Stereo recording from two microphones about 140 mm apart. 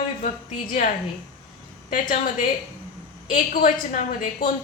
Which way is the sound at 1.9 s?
70° left (ahead or behind).